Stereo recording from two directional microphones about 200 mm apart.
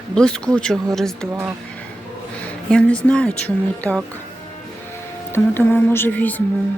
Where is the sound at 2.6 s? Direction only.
5° left (ahead or behind).